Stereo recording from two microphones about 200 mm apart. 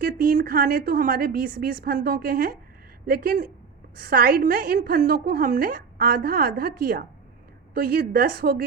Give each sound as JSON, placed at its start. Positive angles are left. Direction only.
{"t": 0.0, "sound": "a woman's voice", "side_deg": -45}